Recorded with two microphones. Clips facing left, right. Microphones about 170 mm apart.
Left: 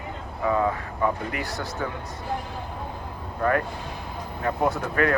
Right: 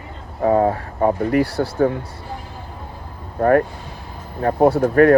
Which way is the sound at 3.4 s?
45° right (ahead or behind).